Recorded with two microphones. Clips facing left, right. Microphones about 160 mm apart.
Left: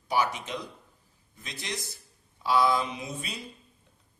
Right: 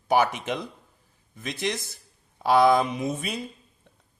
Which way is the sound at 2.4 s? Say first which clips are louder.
Right 6 dB; 55° right (ahead or behind).